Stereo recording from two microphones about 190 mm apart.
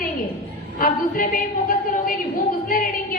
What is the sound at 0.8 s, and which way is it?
A woman's voice, 50° left (ahead or behind).